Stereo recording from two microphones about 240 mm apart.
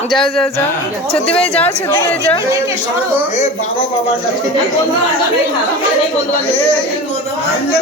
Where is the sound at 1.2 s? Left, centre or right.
Left.